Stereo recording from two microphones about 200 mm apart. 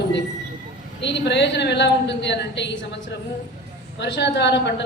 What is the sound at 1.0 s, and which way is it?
A woman's voice, 60° left (ahead or behind).